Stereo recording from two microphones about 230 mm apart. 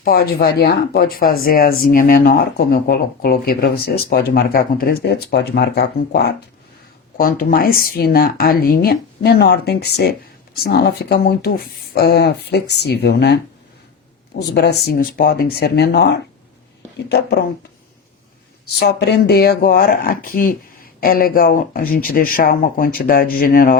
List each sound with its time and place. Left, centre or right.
0.0 s speech: left
18.8 s speech: left